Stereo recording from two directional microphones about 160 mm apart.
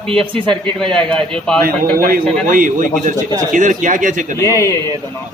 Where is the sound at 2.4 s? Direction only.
55° right (ahead or behind).